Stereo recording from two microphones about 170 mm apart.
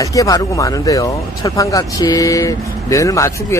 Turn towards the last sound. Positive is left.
turn(degrees=15)  # may be behind; listen again after turning